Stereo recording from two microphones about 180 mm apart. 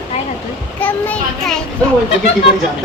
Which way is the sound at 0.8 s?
10° left (ahead or behind).